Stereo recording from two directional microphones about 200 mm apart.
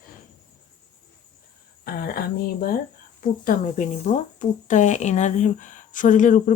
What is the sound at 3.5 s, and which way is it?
Speech, 40° left (ahead or behind).